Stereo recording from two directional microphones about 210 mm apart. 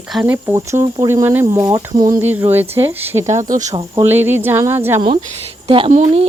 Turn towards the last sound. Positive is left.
turn(degrees=-30)  # may be behind; listen again after turning